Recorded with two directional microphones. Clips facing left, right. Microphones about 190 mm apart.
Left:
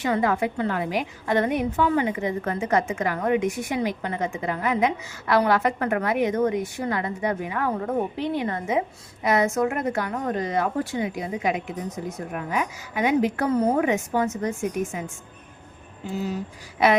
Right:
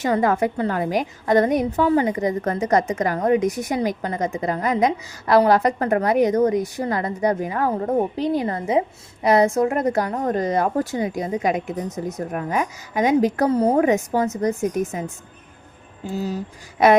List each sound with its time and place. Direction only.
0.0 s a woman's voice: 45° right (ahead or behind)